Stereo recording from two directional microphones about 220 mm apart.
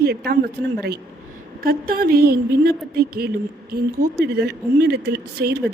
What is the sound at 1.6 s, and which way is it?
Speech, 45° right (ahead or behind).